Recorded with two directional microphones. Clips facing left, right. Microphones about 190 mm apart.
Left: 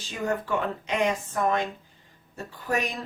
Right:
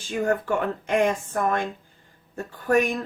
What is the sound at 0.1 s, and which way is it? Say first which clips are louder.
Speech: right 4 dB; 50° right (ahead or behind).